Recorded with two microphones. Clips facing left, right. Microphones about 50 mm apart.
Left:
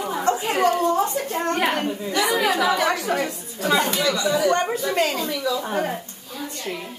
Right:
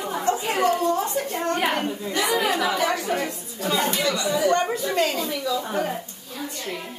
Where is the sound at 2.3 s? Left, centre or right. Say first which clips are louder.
Left 3 dB; left.